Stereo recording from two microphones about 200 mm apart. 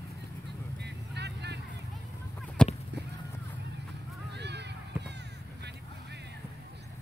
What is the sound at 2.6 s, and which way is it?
Honk, 5° left (ahead or behind).